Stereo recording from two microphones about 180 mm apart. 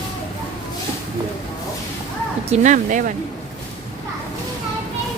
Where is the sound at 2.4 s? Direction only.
40° right (ahead or behind).